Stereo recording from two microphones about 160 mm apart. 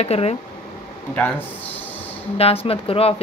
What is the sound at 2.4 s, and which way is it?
Speech, 40° left (ahead or behind).